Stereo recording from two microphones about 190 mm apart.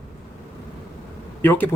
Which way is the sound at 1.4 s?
10° left (ahead or behind).